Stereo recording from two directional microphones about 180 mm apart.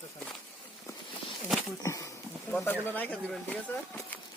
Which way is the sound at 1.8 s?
15° left (ahead or behind).